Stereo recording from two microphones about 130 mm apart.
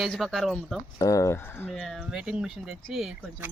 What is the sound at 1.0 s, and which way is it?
Speech, 25° left (ahead or behind).